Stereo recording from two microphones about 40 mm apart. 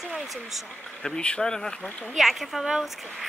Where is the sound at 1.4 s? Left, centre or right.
Centre.